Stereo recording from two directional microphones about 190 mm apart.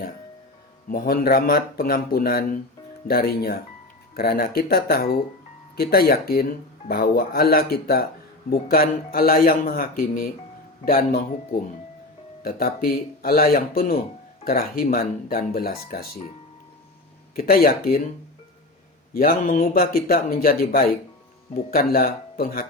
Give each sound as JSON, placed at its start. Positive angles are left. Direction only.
{"t": 0.9, "sound": "speech", "side_deg": 50}
{"t": 12.4, "sound": "speech", "side_deg": 50}
{"t": 17.3, "sound": "speech", "side_deg": 50}
{"t": 19.1, "sound": "speech", "side_deg": 45}